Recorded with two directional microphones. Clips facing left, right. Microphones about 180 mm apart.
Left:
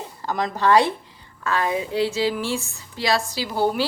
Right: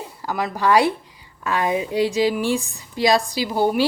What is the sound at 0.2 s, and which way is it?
A woman's voice, 10° right (ahead or behind).